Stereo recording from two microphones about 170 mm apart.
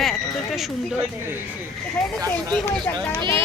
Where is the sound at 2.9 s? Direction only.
25° right (ahead or behind).